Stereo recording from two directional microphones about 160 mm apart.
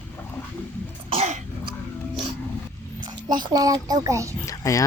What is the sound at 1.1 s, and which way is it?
Cough, 40° right (ahead or behind).